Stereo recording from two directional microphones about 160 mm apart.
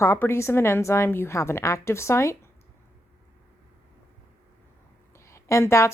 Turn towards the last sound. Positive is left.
turn(degrees=15)  # may be behind; listen again after turning